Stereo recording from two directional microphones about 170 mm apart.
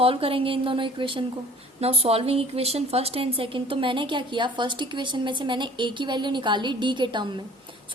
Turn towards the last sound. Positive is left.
turn(degrees=-30)  # may be behind; listen again after turning